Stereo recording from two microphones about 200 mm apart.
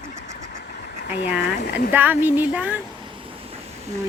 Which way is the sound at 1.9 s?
10° right (ahead or behind).